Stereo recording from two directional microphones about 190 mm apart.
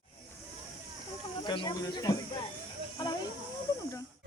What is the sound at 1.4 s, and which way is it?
Speech, 25° left (ahead or behind).